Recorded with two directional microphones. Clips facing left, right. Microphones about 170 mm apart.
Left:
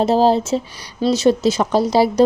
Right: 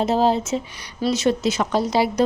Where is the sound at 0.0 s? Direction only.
35° left (ahead or behind).